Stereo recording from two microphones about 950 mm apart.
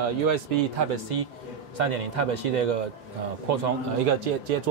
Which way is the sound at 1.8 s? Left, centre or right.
Right.